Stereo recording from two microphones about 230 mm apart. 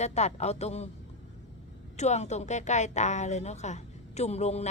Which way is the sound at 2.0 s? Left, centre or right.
Left.